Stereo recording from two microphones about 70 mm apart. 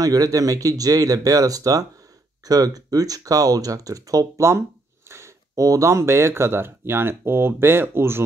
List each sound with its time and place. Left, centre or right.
0.0 s speech: right
4.5 s speech: right